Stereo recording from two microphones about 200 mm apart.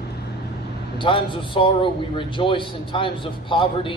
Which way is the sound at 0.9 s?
25° left (ahead or behind).